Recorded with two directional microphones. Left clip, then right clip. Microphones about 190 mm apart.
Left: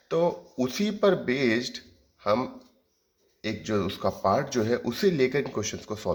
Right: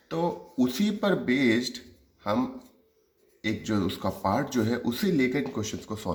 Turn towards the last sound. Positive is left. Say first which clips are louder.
# left 3 dB
turn(degrees=25)  # may be behind; listen again after turning